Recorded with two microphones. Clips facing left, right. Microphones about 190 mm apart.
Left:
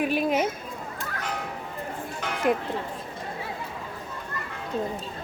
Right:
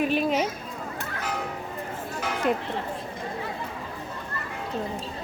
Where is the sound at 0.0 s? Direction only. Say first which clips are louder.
Even; 10° left (ahead or behind).